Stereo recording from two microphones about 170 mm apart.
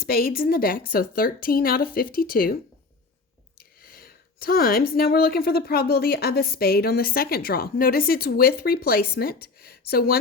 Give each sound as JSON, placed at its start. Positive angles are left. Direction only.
{"t": 0.0, "sound": "a woman's voice", "side_deg": 60}
{"t": 3.8, "sound": "a woman's voice", "side_deg": 60}